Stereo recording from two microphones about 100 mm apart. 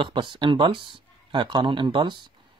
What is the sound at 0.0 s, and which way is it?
Speech, 50° right (ahead or behind).